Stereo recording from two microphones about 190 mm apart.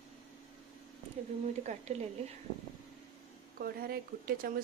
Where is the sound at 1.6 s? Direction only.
35° right (ahead or behind).